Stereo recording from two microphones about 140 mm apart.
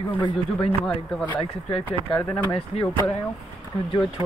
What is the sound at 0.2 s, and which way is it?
Speech, 40° left (ahead or behind).